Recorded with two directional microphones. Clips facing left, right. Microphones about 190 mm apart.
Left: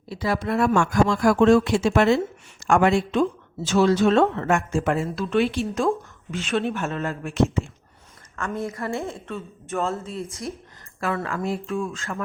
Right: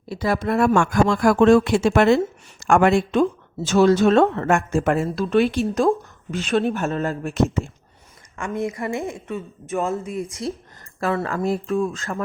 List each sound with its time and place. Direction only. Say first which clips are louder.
0.1 s speech: right 3 dB; 50° right (ahead or behind)
8.4 s a woman's voice: right 3 dB; 15° right (ahead or behind)
11.0 s speech: right 4 dB; 35° right (ahead or behind)